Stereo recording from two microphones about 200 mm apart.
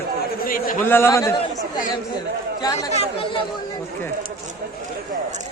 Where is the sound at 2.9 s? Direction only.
30° left (ahead or behind).